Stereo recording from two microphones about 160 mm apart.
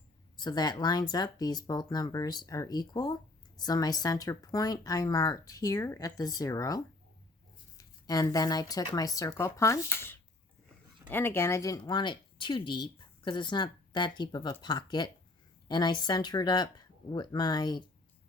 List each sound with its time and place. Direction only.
0.3 s speech: 25° left (ahead or behind)